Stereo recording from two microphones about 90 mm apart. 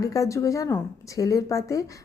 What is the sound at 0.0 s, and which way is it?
A woman's voice, 40° left (ahead or behind).